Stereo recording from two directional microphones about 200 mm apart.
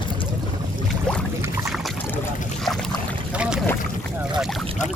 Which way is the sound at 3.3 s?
5° right (ahead or behind).